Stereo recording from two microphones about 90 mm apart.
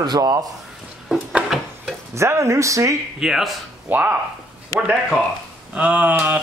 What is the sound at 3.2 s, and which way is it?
Speech, centre (ahead or behind).